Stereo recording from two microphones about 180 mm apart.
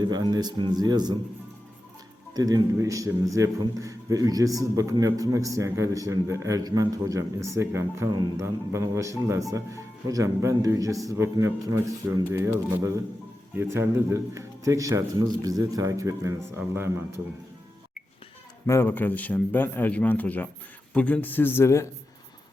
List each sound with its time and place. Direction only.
0.0 s speech: 25° right (ahead or behind)
2.3 s a man's voice: 20° right (ahead or behind)
18.6 s a man's voice: 15° left (ahead or behind)